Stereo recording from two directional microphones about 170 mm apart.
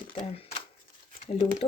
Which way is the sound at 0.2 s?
35° left (ahead or behind).